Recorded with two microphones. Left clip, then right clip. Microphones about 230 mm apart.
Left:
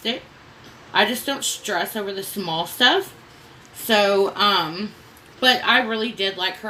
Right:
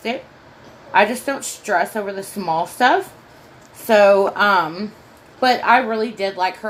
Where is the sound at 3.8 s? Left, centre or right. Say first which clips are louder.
Right 5 dB; centre.